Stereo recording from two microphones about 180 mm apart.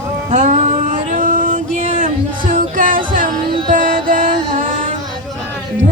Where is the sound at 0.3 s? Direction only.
40° right (ahead or behind).